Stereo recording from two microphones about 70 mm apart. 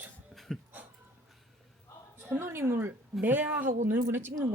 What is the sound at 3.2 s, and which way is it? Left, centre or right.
Speech, right.